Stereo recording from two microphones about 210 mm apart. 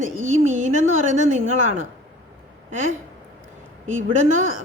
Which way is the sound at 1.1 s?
35° right (ahead or behind).